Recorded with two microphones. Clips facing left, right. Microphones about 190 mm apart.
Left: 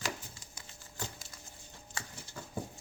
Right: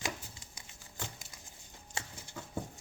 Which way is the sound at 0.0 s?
25° right (ahead or behind).